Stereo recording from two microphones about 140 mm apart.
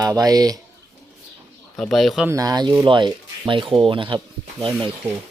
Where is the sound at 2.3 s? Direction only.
25° right (ahead or behind).